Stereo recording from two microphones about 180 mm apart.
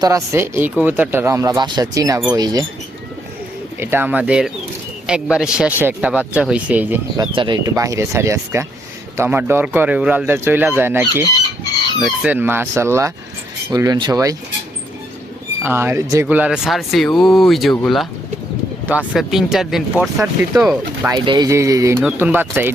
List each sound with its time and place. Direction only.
0.0 s speech: 15° right (ahead or behind)
3.8 s speech: 10° right (ahead or behind)
7.2 s speech: 25° right (ahead or behind)
15.6 s speech: 15° right (ahead or behind)
20.7 s speech: 15° right (ahead or behind)